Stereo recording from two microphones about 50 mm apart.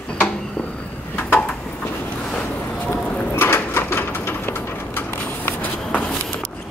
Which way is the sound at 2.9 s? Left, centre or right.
Left.